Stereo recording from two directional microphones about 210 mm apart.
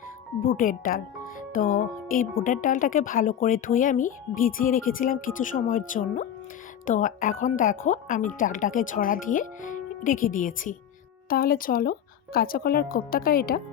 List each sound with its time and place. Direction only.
0.4 s speech: 40° left (ahead or behind)